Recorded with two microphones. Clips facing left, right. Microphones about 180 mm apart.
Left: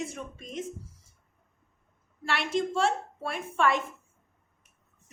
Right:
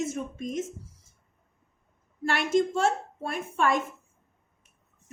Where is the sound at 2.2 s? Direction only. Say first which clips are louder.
Right 5 dB; 45° right (ahead or behind).